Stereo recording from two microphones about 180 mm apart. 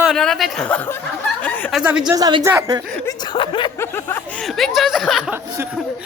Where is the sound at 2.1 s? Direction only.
20° right (ahead or behind).